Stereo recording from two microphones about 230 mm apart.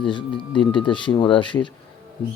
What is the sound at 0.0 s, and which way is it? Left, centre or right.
Speech, left.